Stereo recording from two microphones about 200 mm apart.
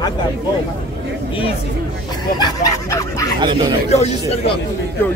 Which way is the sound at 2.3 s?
20° left (ahead or behind).